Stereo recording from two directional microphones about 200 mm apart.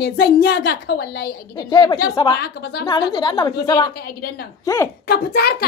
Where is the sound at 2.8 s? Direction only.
20° left (ahead or behind).